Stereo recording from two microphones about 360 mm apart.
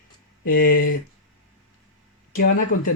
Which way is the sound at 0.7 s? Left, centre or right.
Left.